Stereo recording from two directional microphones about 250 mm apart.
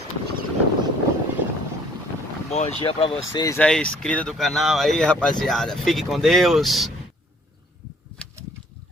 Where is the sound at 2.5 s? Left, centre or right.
Left; by 6.9 s centre.